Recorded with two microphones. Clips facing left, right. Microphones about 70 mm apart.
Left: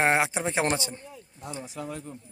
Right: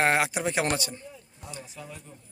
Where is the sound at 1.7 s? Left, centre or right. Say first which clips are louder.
Left 7 dB; left.